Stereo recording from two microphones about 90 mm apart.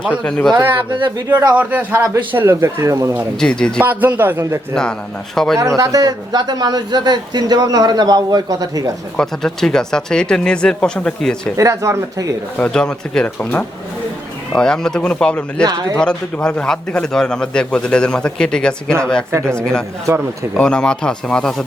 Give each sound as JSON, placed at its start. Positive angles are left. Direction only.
{"t": 0.1, "sound": "a man's voice", "side_deg": 10}
{"t": 0.5, "sound": "a man's voice", "side_deg": -25}
{"t": 3.4, "sound": "a man's voice", "side_deg": 10}
{"t": 3.8, "sound": "a man's voice", "side_deg": -20}
{"t": 4.7, "sound": "a man's voice", "side_deg": 10}
{"t": 5.5, "sound": "speech", "side_deg": -35}
{"t": 9.1, "sound": "a man's voice", "side_deg": 5}
{"t": 11.5, "sound": "speech", "side_deg": -35}
{"t": 12.5, "sound": "a man's voice", "side_deg": 10}
{"t": 15.6, "sound": "speech", "side_deg": -40}
{"t": 16.0, "sound": "a man's voice", "side_deg": 10}